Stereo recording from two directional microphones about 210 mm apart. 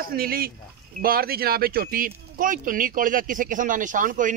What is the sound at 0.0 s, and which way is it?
Speech, 45° right (ahead or behind).